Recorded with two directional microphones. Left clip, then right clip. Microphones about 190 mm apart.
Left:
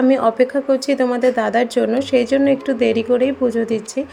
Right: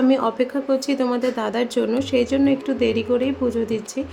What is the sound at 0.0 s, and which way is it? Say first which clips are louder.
A woman's voice: left 5 dB; 20° left (ahead or behind).